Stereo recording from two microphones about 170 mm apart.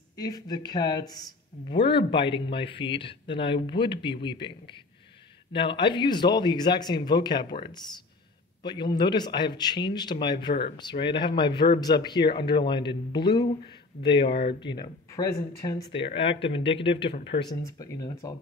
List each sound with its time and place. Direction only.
0.1 s speech: 20° left (ahead or behind)
14.3 s speech: 70° left (ahead or behind)
14.6 s speech: 25° left (ahead or behind)
17.6 s speech: 20° left (ahead or behind)